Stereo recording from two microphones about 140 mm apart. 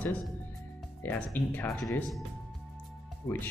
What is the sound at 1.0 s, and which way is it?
Speech, 15° left (ahead or behind).